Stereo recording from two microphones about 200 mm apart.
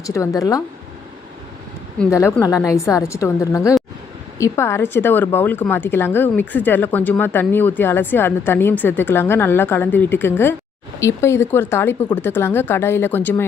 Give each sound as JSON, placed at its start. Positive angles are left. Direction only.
{"t": 0.0, "sound": "a woman's voice", "side_deg": 15}
{"t": 2.0, "sound": "a woman's voice", "side_deg": 15}